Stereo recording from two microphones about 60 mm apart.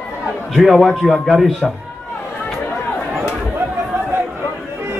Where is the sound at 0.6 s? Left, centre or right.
Centre.